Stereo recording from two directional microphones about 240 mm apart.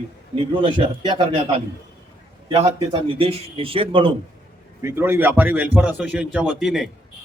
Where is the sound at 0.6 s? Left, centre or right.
Centre.